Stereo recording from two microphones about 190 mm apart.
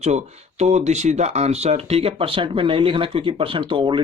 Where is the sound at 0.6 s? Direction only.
35° right (ahead or behind).